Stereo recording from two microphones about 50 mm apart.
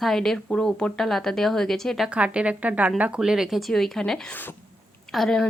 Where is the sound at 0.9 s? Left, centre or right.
Centre.